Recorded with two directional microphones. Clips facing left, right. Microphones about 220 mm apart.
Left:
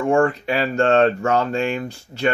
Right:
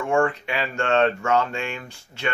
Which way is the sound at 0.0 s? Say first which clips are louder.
Left 4 dB; 35° left (ahead or behind).